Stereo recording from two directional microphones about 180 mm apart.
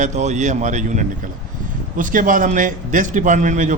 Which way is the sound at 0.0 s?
40° right (ahead or behind).